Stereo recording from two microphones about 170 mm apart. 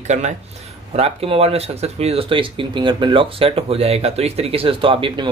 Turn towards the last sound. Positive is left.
turn(degrees=-30)  # may be behind; listen again after turning